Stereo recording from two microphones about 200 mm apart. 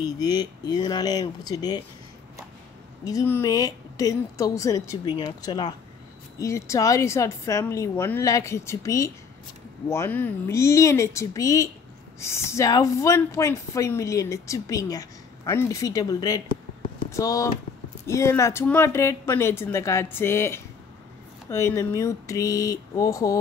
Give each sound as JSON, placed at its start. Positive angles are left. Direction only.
{"t": 0.2, "sound": "speech", "side_deg": 20}
{"t": 3.1, "sound": "speech", "side_deg": 15}